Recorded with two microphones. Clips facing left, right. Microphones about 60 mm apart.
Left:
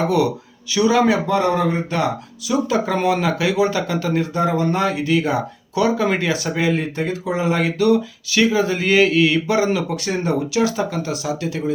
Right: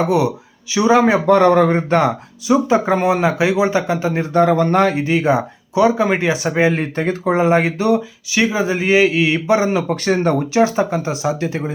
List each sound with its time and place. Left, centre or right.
0.7 s speech: right
1.3 s speech: right
4.3 s speech: right
9.9 s speech: right
10.6 s speech: right